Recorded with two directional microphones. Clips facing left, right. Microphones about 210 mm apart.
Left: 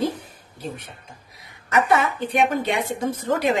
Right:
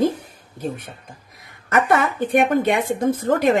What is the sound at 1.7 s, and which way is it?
A woman's voice, 50° right (ahead or behind).